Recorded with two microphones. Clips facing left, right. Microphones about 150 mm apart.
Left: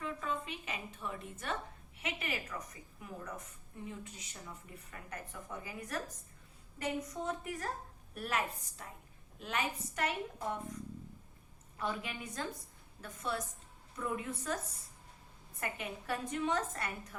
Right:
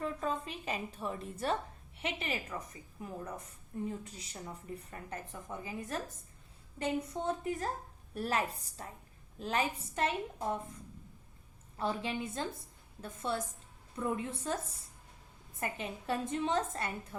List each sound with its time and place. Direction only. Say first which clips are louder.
0.0 s a woman's voice: right 3 dB; 35° right (ahead or behind)
11.8 s a woman's voice: right 4 dB; 30° right (ahead or behind)
15.6 s a woman's voice: right 3 dB; 25° right (ahead or behind)